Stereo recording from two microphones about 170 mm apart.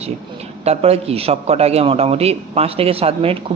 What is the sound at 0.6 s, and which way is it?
A woman's voice, 35° right (ahead or behind).